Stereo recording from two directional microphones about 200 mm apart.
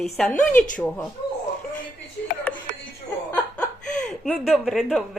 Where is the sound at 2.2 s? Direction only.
55° left (ahead or behind).